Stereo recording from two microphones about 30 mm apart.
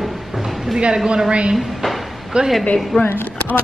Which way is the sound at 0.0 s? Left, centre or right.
Centre.